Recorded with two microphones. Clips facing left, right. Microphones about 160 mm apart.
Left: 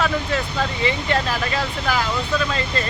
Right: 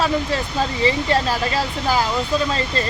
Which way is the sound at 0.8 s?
30° right (ahead or behind).